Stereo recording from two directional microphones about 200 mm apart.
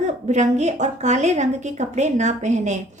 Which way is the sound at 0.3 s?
35° right (ahead or behind).